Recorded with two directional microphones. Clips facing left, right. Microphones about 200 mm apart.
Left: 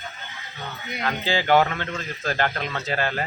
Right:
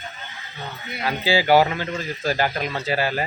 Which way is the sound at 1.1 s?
10° right (ahead or behind).